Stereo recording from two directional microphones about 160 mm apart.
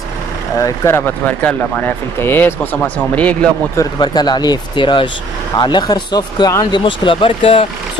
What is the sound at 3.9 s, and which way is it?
Speech, 25° left (ahead or behind).